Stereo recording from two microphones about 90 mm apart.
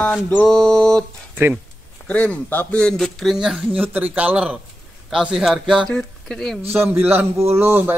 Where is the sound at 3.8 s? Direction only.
20° right (ahead or behind).